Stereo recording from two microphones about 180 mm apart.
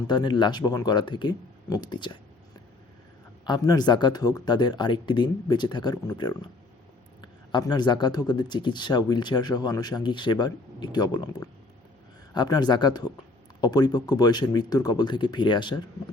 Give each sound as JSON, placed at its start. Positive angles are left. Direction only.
{"t": 0.1, "sound": "speech", "side_deg": 25}
{"t": 3.4, "sound": "speech", "side_deg": 25}